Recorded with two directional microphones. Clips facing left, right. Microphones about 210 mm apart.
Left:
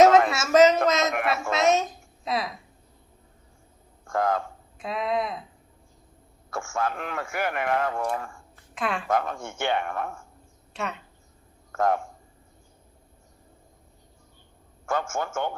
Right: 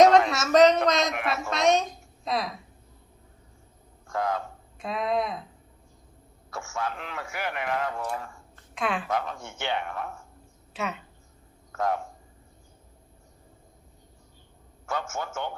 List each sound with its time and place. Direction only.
0.3 s a woman's voice: 5° left (ahead or behind)
4.0 s speech: 50° left (ahead or behind)
4.8 s speech: centre (ahead or behind)
6.5 s a man's voice: 50° left (ahead or behind)
8.5 s a sound: centre (ahead or behind)
9.0 s a man's voice: 50° left (ahead or behind)
10.8 s speech: centre (ahead or behind)
11.7 s a man's voice: 50° left (ahead or behind)
14.8 s a man's voice: 50° left (ahead or behind)